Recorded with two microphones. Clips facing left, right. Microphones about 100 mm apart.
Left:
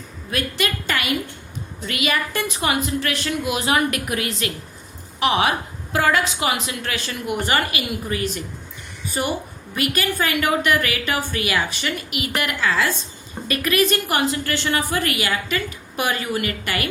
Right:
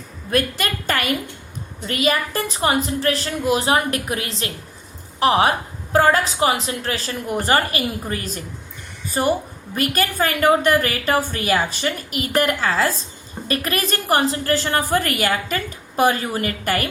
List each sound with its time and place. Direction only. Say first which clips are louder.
0.3 s a woman's voice: right 3 dB; 45° right (ahead or behind)